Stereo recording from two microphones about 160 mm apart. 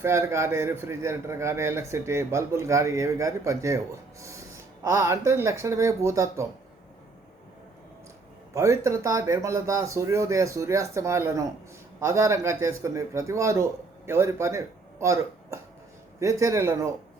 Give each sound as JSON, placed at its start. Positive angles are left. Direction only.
{"t": 0.0, "sound": "a man's voice", "side_deg": -15}
{"t": 8.5, "sound": "speech", "side_deg": -20}